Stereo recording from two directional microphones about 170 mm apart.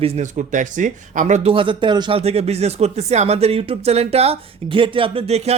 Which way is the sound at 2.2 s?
40° right (ahead or behind).